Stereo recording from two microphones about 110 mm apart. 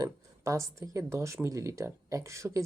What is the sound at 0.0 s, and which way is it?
Speech, 30° right (ahead or behind).